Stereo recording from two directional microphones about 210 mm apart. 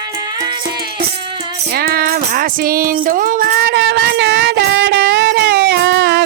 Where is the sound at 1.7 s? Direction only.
45° right (ahead or behind).